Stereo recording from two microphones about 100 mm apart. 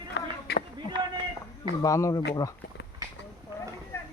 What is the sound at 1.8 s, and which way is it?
Speech, 35° left (ahead or behind).